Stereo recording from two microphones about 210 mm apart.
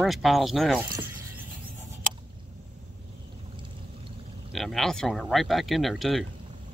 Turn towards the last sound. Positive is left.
turn(degrees=0)  # may be behind; listen again after turning